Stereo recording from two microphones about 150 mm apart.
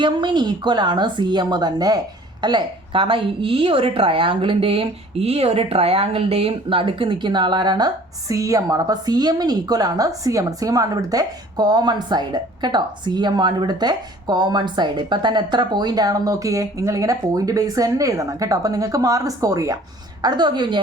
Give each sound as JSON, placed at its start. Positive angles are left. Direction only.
{"t": 0.0, "sound": "a woman's voice", "side_deg": -30}